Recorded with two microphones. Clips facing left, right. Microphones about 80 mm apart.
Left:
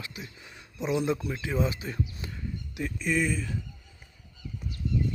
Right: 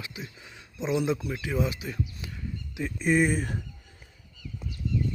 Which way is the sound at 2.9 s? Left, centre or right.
Right.